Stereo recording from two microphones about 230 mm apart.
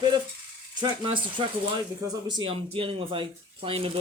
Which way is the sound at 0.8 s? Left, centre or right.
Centre.